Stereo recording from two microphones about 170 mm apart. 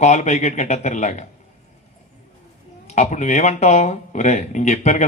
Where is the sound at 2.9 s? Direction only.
45° left (ahead or behind).